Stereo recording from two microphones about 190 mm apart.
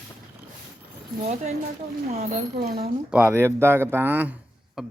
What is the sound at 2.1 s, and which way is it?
Speech, 50° right (ahead or behind).